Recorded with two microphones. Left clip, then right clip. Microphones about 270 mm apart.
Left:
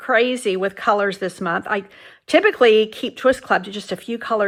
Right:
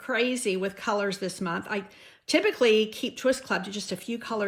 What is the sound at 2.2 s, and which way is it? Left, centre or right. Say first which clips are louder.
Speech: left 9 dB; centre.